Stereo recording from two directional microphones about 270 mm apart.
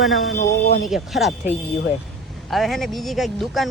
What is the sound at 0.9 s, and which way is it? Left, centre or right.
Speech, centre.